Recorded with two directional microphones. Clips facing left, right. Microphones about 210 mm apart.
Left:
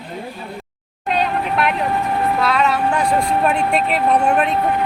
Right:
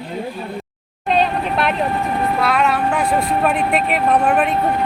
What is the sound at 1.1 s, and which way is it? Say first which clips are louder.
Vehicle: right 2 dB; 30° right (ahead or behind).